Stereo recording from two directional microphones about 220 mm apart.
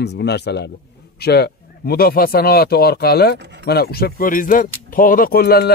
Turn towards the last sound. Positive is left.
turn(degrees=45)  # may be behind; listen again after turning